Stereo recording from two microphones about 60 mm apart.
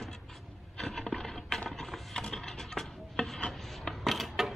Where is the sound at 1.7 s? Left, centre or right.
Centre.